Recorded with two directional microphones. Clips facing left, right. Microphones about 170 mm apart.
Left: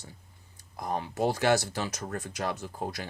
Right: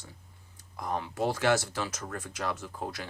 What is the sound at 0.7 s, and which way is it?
Speech, 40° left (ahead or behind).